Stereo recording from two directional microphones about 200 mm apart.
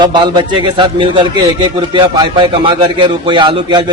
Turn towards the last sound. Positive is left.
turn(degrees=-20)  # may be behind; listen again after turning